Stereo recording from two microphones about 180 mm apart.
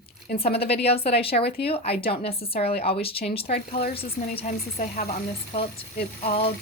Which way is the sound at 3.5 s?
50° left (ahead or behind).